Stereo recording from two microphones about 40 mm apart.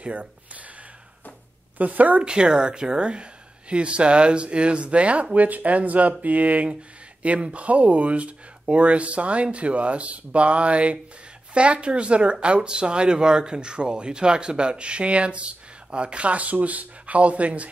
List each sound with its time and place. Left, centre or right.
0.0 s speech: right
1.8 s a woman's voice: right
2.2 s speech: right